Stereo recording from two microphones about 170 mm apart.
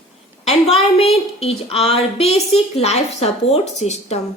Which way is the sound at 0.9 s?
35° left (ahead or behind).